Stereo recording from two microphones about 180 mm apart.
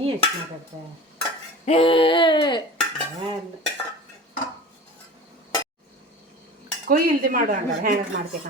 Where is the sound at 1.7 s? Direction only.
30° left (ahead or behind).